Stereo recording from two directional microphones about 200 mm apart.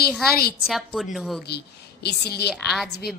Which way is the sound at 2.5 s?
Centre (ahead or behind).